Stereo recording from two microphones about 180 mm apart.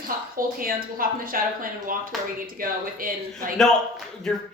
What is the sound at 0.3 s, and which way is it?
Speech, 50° right (ahead or behind).